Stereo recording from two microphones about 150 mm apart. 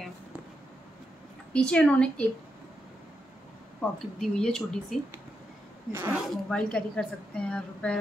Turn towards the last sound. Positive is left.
turn(degrees=5)  # may be behind; listen again after turning